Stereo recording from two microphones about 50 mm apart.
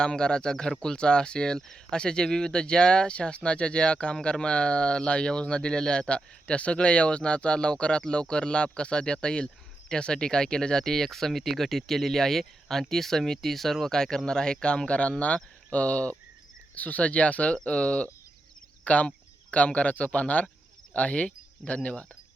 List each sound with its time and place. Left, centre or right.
0.0 s speech: centre